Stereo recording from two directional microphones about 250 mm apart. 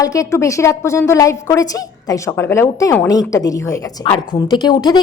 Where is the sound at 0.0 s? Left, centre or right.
Centre.